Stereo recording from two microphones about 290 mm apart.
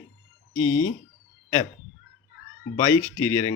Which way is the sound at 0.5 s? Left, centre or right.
Left.